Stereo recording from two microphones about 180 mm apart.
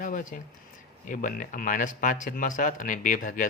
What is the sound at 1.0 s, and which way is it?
Speech, 45° left (ahead or behind).